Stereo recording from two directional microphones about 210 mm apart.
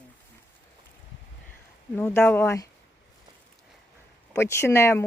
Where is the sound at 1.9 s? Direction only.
10° left (ahead or behind).